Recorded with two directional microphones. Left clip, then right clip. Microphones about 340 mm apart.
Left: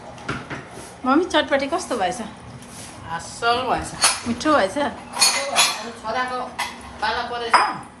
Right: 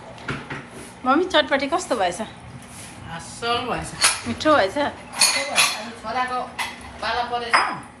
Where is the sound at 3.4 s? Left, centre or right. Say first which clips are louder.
Left 4 dB; left.